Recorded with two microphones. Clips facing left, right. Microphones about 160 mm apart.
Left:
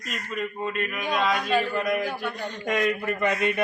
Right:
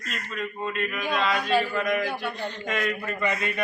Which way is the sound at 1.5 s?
10° right (ahead or behind).